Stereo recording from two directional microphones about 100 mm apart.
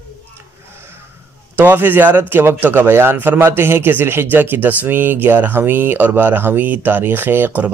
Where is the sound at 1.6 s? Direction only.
20° right (ahead or behind).